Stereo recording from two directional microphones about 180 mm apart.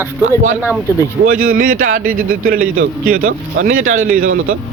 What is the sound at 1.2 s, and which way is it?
Speech, 50° right (ahead or behind).